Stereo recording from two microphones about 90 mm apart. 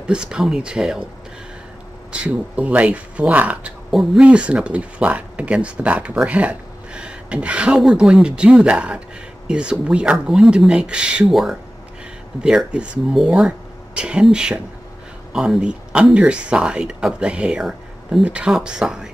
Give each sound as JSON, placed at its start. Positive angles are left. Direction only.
{"t": 0.0, "sound": "speech", "side_deg": -10}
{"t": 2.2, "sound": "speech", "side_deg": -15}
{"t": 3.9, "sound": "speech", "side_deg": 0}
{"t": 4.2, "sound": "speech", "side_deg": -10}